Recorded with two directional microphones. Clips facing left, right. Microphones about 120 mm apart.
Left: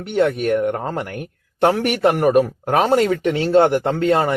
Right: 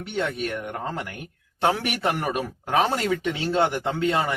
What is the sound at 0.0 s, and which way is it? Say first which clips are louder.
Speech: left 9 dB; 55° left (ahead or behind).